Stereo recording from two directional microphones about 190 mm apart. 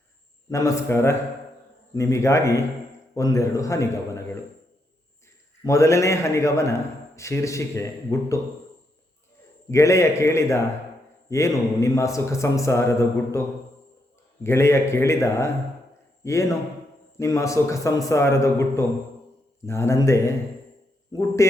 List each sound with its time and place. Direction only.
0.5 s speech: 15° left (ahead or behind)
5.6 s speech: 15° left (ahead or behind)
9.6 s speech: 15° left (ahead or behind)
14.4 s speech: 15° left (ahead or behind)